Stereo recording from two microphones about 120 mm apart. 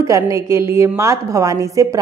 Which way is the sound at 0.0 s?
25° right (ahead or behind).